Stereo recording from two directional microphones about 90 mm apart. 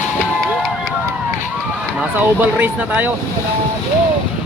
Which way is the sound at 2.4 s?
20° right (ahead or behind).